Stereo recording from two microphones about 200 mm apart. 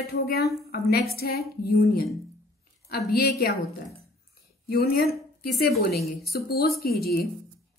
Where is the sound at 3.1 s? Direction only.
50° left (ahead or behind).